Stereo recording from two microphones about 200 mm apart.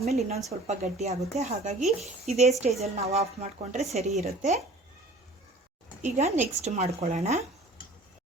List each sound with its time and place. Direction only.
0.0 s speech: 30° right (ahead or behind)
6.0 s speech: 35° right (ahead or behind)